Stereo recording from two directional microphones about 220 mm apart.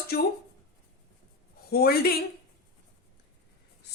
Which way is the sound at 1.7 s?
45° left (ahead or behind).